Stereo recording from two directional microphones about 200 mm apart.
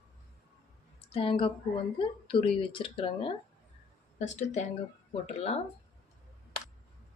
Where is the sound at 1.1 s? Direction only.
30° left (ahead or behind).